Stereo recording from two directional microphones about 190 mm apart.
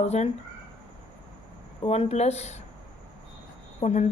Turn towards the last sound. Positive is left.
turn(degrees=35)  # may be behind; listen again after turning